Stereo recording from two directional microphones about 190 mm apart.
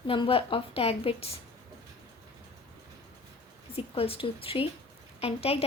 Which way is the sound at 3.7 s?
30° left (ahead or behind).